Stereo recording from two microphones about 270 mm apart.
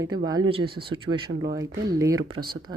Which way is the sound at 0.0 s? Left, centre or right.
Centre.